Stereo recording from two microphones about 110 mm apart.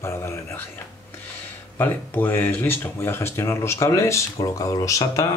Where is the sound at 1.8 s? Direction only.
20° left (ahead or behind).